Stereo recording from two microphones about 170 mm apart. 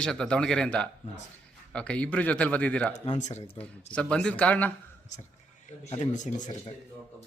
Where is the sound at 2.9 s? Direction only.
45° left (ahead or behind).